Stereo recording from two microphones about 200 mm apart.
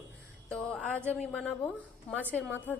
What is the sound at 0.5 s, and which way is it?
A woman's voice, 5° left (ahead or behind).